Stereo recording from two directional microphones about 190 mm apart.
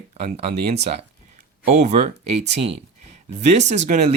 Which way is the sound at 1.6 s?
35° right (ahead or behind).